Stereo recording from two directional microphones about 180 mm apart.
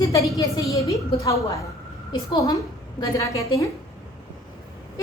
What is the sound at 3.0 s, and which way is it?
Speech, 15° left (ahead or behind).